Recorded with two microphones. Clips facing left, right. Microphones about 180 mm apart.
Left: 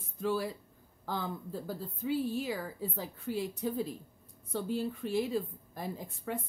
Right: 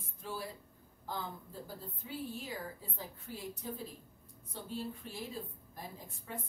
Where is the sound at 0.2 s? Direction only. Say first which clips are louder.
Left 10 dB; 80° left.